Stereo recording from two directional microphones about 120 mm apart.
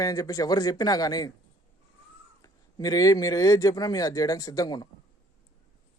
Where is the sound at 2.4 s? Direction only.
30° left (ahead or behind).